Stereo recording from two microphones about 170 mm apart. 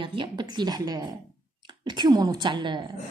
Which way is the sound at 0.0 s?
30° right (ahead or behind).